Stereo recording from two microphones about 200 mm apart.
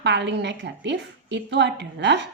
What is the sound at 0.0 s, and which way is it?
Speech, 60° right (ahead or behind).